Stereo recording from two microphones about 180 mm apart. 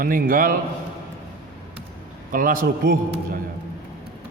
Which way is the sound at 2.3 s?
50° right (ahead or behind).